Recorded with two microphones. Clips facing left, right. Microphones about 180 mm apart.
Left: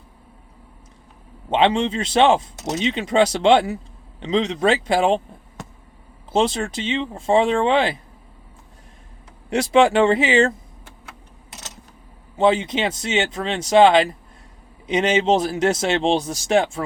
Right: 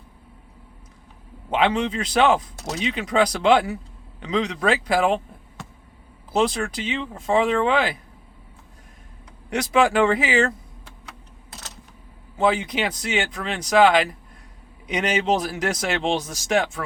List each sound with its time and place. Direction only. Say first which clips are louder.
1.5 s speech: left 3 dB; 25° left (ahead or behind)
6.3 s speech: left 2 dB; 25° left (ahead or behind)
9.5 s speech: left 4 dB; 25° left (ahead or behind)
12.4 s speech: left 3 dB; 25° left (ahead or behind)